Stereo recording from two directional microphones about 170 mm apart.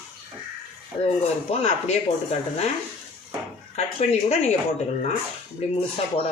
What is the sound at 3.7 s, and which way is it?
Speech, 40° left (ahead or behind).